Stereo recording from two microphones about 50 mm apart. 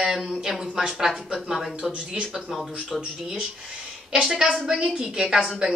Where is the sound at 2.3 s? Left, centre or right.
Centre.